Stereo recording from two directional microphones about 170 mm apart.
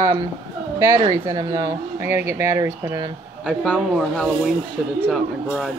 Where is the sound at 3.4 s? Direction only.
5° left (ahead or behind).